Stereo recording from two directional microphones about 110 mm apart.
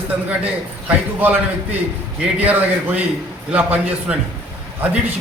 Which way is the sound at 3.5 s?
15° right (ahead or behind).